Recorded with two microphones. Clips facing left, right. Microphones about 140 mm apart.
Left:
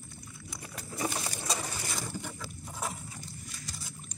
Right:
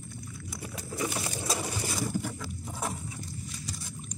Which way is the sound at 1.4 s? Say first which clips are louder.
Right 4 dB; 5° right (ahead or behind).